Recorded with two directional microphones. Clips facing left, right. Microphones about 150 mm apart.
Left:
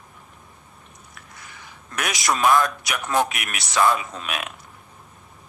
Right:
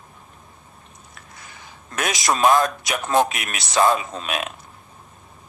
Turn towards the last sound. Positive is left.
turn(degrees=-25)  # may be behind; listen again after turning